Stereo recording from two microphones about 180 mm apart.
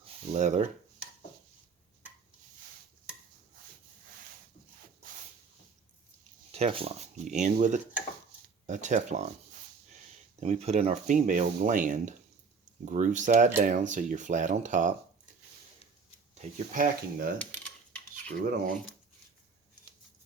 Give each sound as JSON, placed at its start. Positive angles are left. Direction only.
{"t": 0.3, "sound": "speech", "side_deg": -40}
{"t": 6.5, "sound": "speech", "side_deg": -35}
{"t": 10.4, "sound": "speech", "side_deg": -35}
{"t": 16.3, "sound": "speech", "side_deg": -45}
{"t": 17.3, "sound": "coin", "side_deg": 5}